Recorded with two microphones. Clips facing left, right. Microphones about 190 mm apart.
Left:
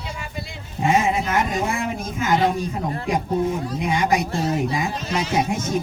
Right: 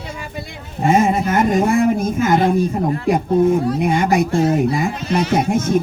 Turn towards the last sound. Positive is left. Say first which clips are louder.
# right 5 dB
turn(degrees=-55)  # may be behind; listen again after turning